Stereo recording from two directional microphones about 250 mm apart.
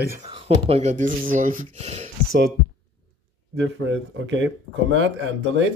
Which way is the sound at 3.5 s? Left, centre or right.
Right.